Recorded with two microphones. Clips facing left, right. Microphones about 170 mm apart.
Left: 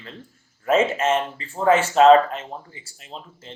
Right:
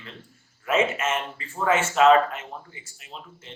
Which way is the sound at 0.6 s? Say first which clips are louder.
Left 4 dB; 35° left (ahead or behind).